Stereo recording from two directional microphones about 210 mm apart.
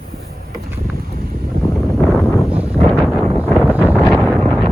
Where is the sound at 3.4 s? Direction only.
5° right (ahead or behind).